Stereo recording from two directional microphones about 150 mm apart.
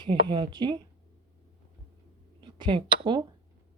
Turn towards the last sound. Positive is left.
turn(degrees=-30)  # may be behind; listen again after turning